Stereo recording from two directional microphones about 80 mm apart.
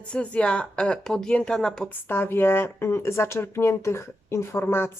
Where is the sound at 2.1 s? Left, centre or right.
Left.